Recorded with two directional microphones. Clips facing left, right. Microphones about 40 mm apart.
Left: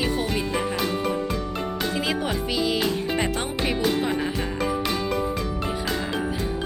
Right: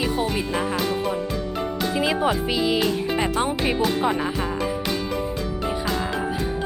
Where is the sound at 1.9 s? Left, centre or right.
Centre.